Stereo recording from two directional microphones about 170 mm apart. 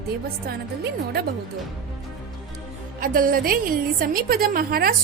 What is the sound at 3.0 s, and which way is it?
A woman's voice, 55° right (ahead or behind).